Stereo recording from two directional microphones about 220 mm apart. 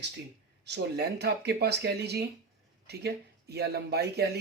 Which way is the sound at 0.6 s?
50° right (ahead or behind).